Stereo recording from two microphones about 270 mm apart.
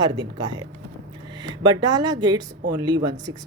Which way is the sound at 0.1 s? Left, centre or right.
Centre.